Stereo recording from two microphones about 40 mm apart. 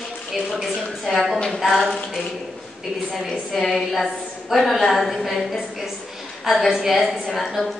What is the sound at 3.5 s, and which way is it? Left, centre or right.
A woman's voice, centre.